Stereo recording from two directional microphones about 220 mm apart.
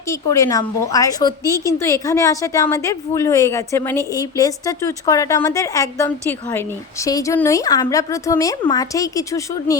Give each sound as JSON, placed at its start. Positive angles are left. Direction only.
{"t": 0.1, "sound": "a woman's voice", "side_deg": 15}